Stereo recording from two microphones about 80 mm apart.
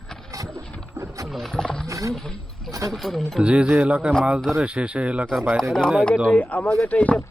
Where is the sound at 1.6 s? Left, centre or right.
Centre.